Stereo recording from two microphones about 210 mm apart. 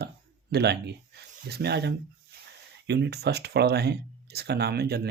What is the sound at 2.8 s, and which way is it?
Speech, 55° right (ahead or behind).